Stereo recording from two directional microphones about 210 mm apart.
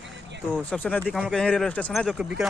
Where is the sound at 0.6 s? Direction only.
5° left (ahead or behind).